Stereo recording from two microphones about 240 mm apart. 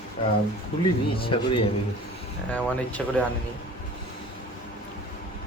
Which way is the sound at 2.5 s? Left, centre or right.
Centre.